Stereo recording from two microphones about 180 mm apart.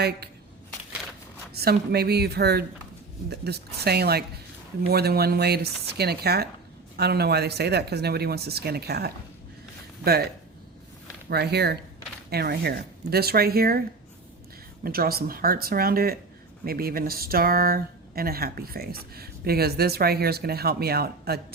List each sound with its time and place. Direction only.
1.5 s speech: 60° right (ahead or behind)
11.3 s speech: 65° right (ahead or behind)
14.8 s speech: 55° right (ahead or behind)